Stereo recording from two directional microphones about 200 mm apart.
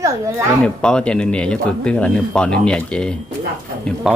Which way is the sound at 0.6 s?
5° left (ahead or behind).